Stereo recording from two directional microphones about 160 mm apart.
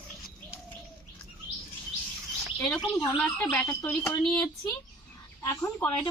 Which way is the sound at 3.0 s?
10° left (ahead or behind).